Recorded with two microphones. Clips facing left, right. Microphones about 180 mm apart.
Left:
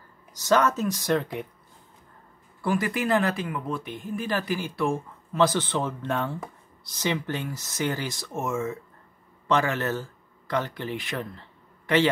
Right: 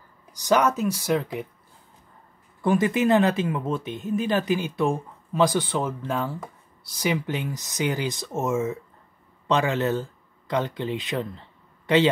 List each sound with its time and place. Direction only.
0.3 s speech: 15° right (ahead or behind)
2.6 s speech: 20° right (ahead or behind)